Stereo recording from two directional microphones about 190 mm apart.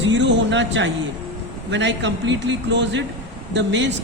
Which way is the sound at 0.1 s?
70° right (ahead or behind).